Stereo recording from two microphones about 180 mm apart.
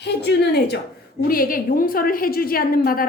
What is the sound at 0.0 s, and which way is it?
Speech, 65° left (ahead or behind).